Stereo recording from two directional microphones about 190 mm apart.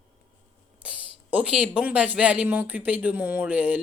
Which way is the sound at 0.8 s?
5° right (ahead or behind).